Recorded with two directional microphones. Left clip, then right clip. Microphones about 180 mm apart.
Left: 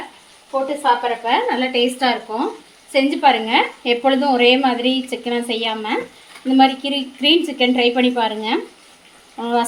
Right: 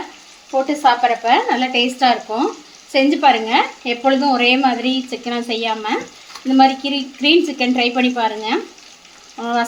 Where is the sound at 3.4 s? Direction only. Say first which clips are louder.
Right 1 dB; centre (ahead or behind).